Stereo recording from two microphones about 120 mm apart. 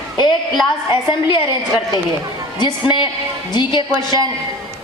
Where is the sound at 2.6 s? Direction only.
40° left (ahead or behind).